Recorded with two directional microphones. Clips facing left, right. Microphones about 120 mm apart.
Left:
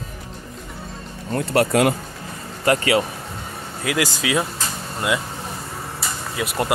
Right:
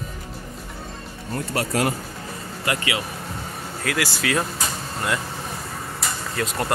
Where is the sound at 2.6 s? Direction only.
40° left (ahead or behind).